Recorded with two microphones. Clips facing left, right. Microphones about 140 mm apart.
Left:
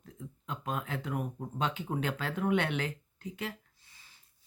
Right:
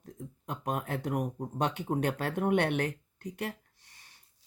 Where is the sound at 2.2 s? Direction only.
55° right (ahead or behind).